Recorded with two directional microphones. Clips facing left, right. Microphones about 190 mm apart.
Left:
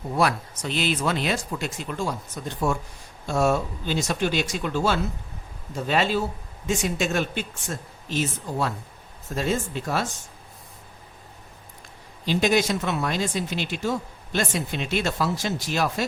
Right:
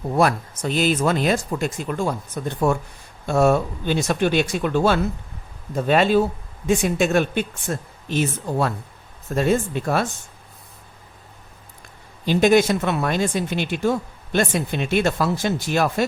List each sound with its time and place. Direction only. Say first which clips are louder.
0.2 s speech: right 4 dB; 50° right (ahead or behind)
12.2 s speech: right 6 dB; 50° right (ahead or behind)